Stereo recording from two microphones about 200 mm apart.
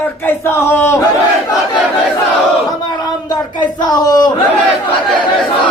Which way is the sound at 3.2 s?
20° left (ahead or behind).